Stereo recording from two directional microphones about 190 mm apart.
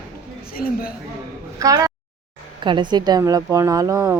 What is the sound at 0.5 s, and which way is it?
Speech, 50° left (ahead or behind).